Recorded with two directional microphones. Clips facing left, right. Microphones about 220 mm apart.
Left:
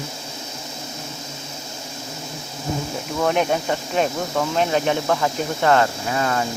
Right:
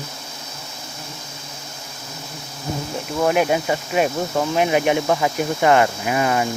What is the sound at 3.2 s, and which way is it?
Speech, 5° right (ahead or behind).